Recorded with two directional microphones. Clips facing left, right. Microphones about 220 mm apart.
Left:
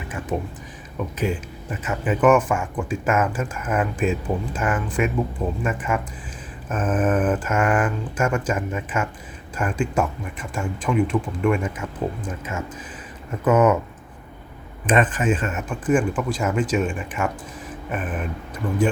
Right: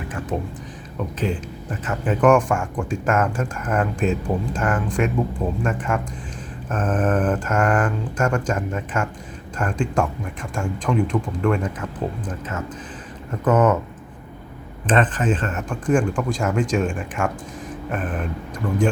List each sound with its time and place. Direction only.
0.3 s speech: 10° left (ahead or behind)
14.8 s speech: 10° left (ahead or behind)